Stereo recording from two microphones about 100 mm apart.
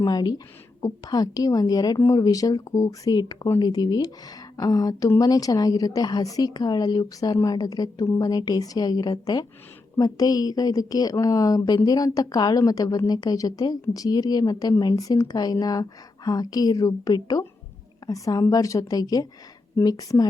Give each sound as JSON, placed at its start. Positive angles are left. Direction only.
{"t": 0.0, "sound": "a woman's voice", "side_deg": 40}